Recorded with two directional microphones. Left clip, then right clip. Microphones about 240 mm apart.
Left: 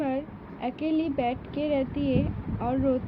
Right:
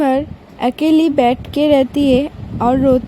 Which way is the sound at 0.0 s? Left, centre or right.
Right.